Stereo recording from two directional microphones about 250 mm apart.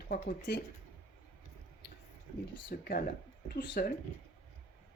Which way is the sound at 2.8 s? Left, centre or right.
Left.